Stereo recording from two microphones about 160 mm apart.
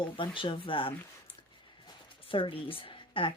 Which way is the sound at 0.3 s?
30° left (ahead or behind).